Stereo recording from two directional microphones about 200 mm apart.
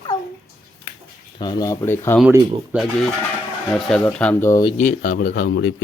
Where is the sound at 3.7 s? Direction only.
5° left (ahead or behind).